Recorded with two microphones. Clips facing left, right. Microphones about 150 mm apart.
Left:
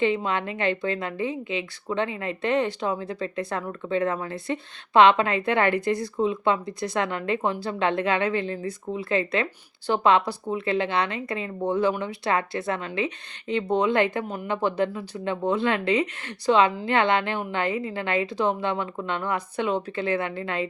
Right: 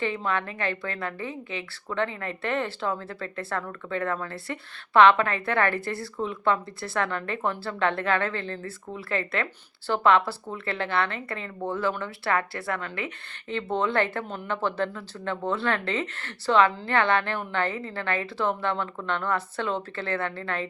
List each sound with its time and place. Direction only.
0.0 s a woman's voice: 20° left (ahead or behind)